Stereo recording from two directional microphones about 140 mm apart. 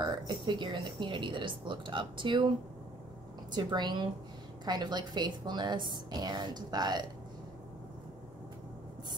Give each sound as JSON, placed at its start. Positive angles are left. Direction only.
{"t": 0.0, "sound": "speech", "side_deg": -35}
{"t": 3.5, "sound": "speech", "side_deg": -30}